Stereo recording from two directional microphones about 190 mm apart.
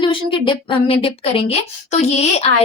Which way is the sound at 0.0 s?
25° left (ahead or behind).